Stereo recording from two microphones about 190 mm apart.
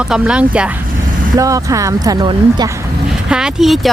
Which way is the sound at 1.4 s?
15° right (ahead or behind).